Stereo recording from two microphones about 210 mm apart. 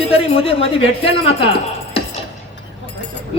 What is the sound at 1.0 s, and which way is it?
Speech, 25° left (ahead or behind).